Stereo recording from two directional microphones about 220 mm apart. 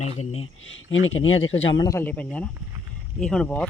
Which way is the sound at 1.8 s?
15° left (ahead or behind).